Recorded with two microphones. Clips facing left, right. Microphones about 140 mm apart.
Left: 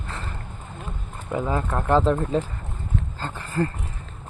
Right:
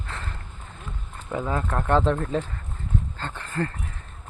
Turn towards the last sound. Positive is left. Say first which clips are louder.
# left 3 dB
turn(degrees=20)  # may be behind; listen again after turning